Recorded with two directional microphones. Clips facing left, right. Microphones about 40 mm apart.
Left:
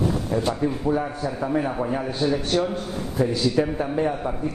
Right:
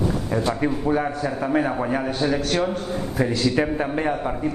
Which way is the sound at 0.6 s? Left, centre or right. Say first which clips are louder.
Right 1 dB; right.